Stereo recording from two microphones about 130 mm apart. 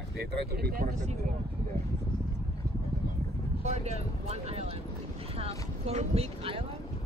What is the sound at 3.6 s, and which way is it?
Speech, 55° right (ahead or behind).